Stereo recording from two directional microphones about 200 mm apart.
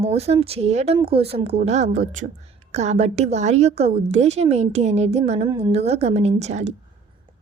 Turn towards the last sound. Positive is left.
turn(degrees=-35)  # may be behind; listen again after turning